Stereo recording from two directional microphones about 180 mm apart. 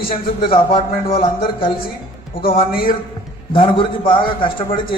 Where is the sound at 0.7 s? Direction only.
30° left (ahead or behind).